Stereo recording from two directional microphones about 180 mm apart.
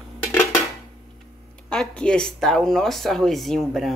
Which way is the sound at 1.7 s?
5° left (ahead or behind).